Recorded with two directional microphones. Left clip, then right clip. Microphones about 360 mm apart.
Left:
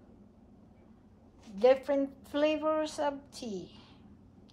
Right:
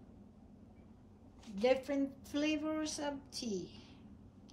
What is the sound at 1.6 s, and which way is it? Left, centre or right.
A woman's voice, centre.